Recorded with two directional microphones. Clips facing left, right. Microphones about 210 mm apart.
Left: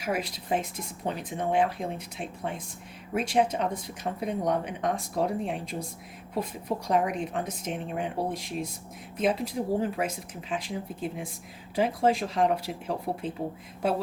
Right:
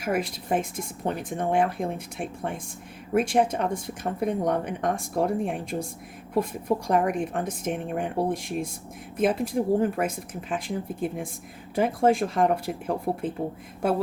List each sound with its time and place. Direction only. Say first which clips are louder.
0.0 s speech: right 4 dB; 50° right (ahead or behind)